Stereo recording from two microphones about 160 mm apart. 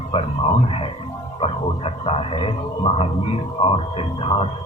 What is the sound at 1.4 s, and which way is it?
Speech, 35° left (ahead or behind).